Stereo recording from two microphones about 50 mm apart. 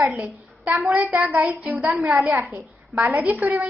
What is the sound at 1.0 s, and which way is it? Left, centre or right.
Speech, right.